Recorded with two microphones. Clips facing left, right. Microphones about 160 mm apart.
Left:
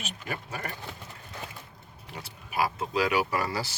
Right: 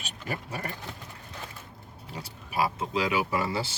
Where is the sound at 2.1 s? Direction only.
30° right (ahead or behind).